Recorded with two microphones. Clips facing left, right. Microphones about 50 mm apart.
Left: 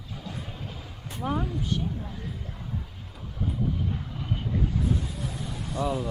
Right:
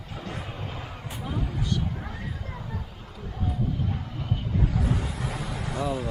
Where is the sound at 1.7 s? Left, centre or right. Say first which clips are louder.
Even; right.